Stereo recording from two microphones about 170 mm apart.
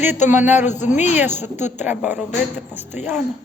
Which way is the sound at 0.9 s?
45° left (ahead or behind).